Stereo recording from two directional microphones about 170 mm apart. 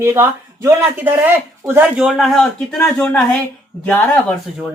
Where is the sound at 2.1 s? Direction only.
Centre (ahead or behind).